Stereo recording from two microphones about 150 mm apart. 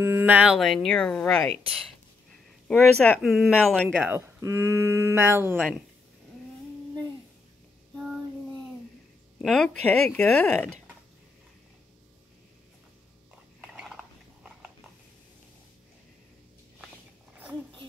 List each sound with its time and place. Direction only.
0.0 s speech: 15° right (ahead or behind); by 1.5 s 5° left (ahead or behind)
2.7 s speech: 5° left (ahead or behind)
4.0 s speech: 15° right (ahead or behind)
5.6 s speech: centre (ahead or behind)
7.9 s child singing: 5° right (ahead or behind)
9.4 s speech: centre (ahead or behind)
13.6 s a sound: 5° right (ahead or behind)